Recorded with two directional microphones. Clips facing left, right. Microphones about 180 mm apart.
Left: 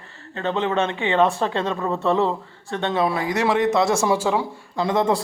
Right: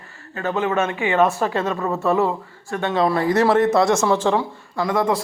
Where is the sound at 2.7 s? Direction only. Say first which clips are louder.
Right 1 dB; 25° left (ahead or behind).